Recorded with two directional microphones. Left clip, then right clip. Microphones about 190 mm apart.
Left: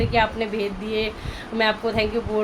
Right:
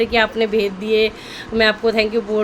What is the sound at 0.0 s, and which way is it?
A woman's voice, 45° right (ahead or behind).